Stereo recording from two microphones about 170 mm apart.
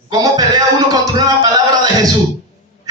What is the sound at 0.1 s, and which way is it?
Music, 25° right (ahead or behind).